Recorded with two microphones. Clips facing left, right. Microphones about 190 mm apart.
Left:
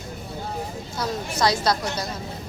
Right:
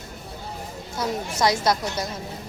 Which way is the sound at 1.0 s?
20° right (ahead or behind).